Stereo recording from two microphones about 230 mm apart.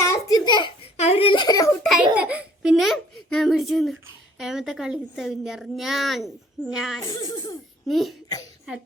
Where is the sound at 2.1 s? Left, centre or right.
Centre.